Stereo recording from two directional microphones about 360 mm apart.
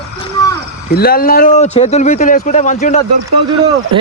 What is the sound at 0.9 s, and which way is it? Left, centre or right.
Speech, left.